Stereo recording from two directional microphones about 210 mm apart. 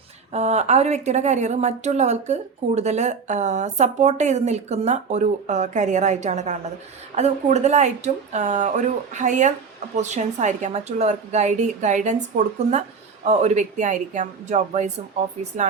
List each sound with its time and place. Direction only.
0.3 s a woman's voice: 30° right (ahead or behind)